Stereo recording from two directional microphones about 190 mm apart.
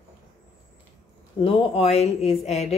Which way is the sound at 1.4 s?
30° left (ahead or behind).